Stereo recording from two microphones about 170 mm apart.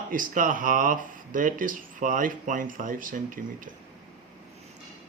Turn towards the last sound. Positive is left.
turn(degrees=-50)  # may be behind; listen again after turning